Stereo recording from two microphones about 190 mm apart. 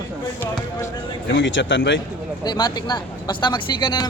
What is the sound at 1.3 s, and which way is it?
Speech, 75° left (ahead or behind).